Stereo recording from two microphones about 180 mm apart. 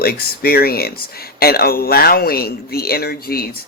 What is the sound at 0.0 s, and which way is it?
A man's voice, 60° left (ahead or behind).